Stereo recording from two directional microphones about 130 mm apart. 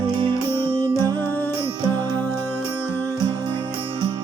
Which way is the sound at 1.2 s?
15° left (ahead or behind).